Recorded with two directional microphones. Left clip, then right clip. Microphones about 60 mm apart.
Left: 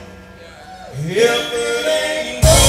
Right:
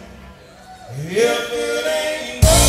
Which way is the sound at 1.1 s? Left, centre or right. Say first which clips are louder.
Left 2 dB; left.